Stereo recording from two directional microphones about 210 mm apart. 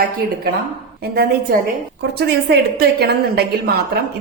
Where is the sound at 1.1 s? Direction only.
45° right (ahead or behind).